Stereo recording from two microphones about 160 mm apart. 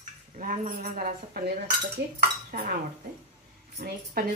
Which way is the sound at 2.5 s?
80° right.